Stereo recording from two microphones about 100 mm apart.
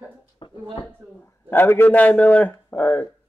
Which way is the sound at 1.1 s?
20° left (ahead or behind).